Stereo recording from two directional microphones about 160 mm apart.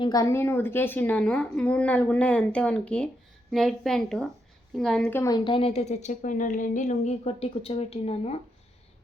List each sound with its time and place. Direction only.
0.0 s a woman's voice: 20° left (ahead or behind); by 5.2 s 5° left (ahead or behind)
5.2 s a woman's voice: 30° left (ahead or behind)